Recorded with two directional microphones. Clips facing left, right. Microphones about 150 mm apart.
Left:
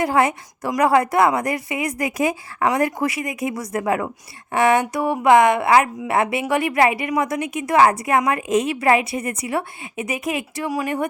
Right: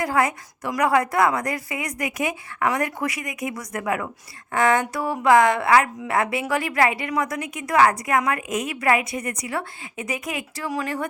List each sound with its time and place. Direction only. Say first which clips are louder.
0.0 s a woman's voice: left 4 dB; 25° left (ahead or behind)
10.7 s speech: left 3 dB; 15° left (ahead or behind)